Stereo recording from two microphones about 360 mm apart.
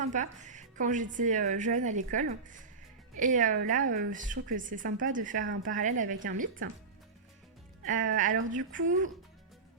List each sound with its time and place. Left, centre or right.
0.0 s speech: centre
7.9 s speech: right